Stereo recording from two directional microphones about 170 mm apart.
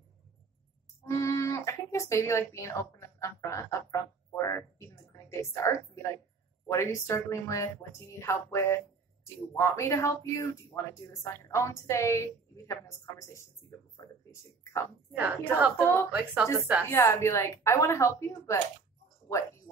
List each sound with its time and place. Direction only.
1.0 s a sound: 20° left (ahead or behind)
6.7 s a woman's voice: 15° left (ahead or behind)
15.1 s a woman's voice: 10° right (ahead or behind)
16.9 s a woman's voice: 15° left (ahead or behind)